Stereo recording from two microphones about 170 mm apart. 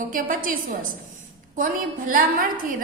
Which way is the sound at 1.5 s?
55° right (ahead or behind).